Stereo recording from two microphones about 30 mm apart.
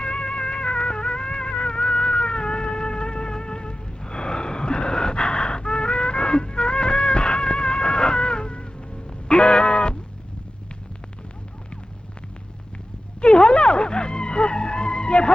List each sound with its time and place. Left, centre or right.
0.0 s music: left
13.2 s music: left